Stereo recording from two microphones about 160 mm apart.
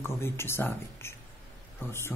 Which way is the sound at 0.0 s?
15° left (ahead or behind).